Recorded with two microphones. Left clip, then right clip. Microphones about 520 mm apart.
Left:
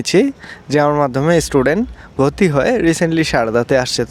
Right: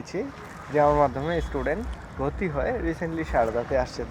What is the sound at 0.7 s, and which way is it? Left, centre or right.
Speech, left.